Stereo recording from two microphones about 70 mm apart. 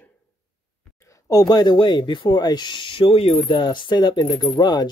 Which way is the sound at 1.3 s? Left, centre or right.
Left.